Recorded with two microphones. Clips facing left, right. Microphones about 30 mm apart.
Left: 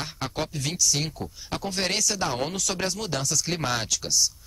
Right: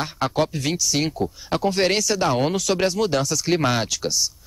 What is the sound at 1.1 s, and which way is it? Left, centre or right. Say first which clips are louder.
Speech: right 9 dB; right.